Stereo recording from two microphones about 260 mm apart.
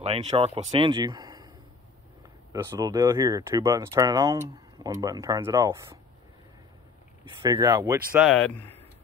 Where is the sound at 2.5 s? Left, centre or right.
Centre.